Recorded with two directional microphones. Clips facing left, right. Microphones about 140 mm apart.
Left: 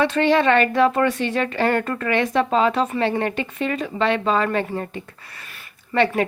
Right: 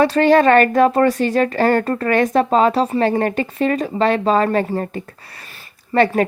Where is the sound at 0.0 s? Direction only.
40° right (ahead or behind).